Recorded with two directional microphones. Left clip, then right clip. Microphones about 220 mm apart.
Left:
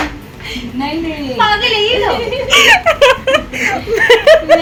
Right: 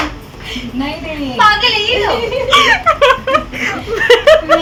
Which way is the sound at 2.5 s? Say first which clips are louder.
Left 2 dB; 5° left (ahead or behind).